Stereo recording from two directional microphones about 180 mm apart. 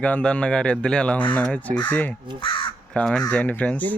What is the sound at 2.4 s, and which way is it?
Crow, 30° left (ahead or behind).